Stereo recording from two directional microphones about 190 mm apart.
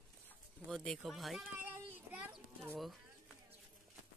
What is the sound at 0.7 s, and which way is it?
Speech, centre (ahead or behind).